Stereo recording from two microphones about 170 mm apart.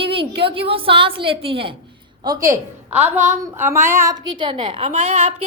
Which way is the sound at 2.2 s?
20° right (ahead or behind).